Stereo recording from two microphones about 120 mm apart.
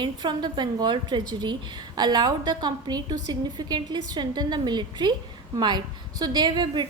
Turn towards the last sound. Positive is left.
turn(degrees=-40)  # may be behind; listen again after turning